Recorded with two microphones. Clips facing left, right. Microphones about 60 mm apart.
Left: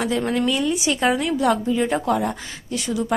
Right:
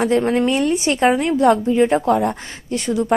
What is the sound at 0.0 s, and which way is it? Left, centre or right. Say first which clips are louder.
Speech: right 5 dB; right.